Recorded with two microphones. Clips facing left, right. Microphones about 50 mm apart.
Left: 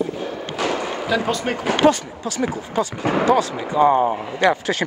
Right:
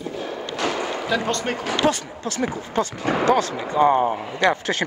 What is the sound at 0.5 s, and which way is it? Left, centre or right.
Speech, centre.